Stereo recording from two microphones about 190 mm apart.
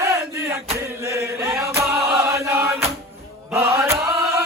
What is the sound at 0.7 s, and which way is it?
Chant, 15° right (ahead or behind).